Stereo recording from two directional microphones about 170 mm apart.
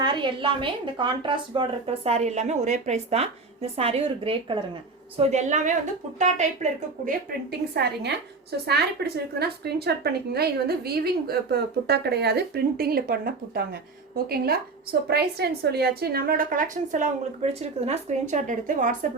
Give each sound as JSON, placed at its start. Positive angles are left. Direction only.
{"t": 0.0, "sound": "a woman's voice", "side_deg": -30}
{"t": 7.3, "sound": "a woman's voice", "side_deg": -70}